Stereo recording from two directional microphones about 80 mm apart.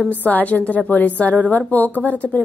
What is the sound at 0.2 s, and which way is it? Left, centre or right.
A woman's voice, left.